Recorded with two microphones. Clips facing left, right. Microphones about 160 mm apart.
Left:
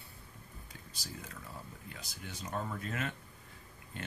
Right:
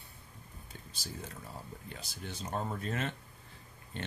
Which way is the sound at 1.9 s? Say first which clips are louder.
Right 3 dB; 30° right (ahead or behind).